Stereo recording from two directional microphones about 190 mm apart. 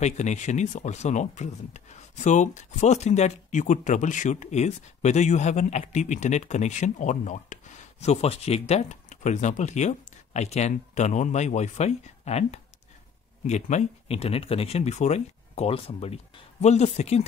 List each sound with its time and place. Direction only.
0.0 s speech: 35° left (ahead or behind)